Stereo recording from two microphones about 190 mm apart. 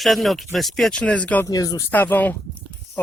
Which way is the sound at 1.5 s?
20° left (ahead or behind).